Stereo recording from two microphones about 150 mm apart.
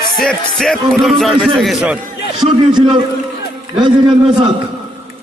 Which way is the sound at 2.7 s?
30° right (ahead or behind).